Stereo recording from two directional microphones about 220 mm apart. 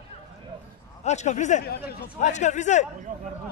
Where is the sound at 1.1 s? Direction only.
30° left (ahead or behind).